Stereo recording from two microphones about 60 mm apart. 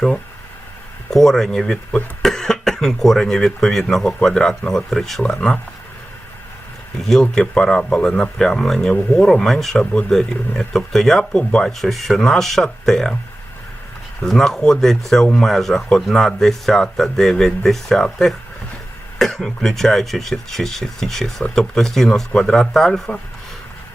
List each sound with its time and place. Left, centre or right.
1.1 s speech: centre
7.0 s speech: centre
11.8 s speech: centre
14.2 s speech: centre
22.3 s speech: centre
22.5 s speech: centre